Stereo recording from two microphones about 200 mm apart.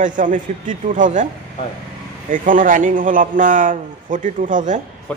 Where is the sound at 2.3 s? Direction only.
40° right (ahead or behind).